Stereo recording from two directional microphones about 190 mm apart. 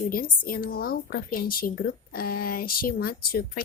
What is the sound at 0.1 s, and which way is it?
Speech, 50° left (ahead or behind).